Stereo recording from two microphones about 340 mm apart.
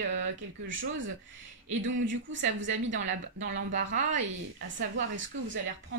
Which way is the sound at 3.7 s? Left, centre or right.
Right.